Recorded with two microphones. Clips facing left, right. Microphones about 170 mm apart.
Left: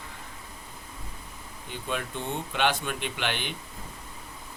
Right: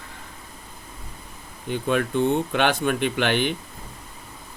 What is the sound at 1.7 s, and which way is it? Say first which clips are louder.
Speech: right 10 dB; 60° right (ahead or behind).